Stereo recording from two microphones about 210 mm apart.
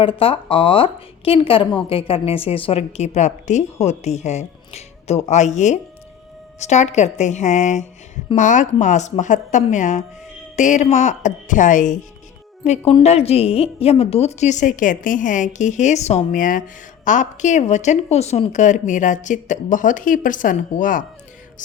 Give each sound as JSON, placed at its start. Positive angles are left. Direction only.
{"t": 0.0, "sound": "a woman's voice", "side_deg": 25}